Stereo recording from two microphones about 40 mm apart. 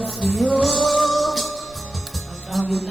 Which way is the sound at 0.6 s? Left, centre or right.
Centre.